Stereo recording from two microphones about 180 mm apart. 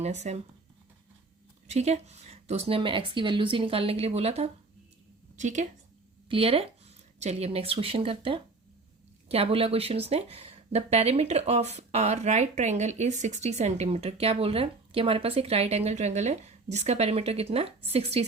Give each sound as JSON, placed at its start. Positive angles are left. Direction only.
{"t": 0.0, "sound": "speech", "side_deg": -40}
{"t": 1.6, "sound": "a woman's voice", "side_deg": -40}
{"t": 6.2, "sound": "speech", "side_deg": -30}